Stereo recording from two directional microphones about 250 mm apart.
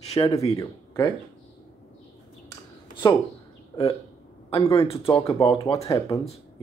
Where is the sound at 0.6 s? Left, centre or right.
Centre.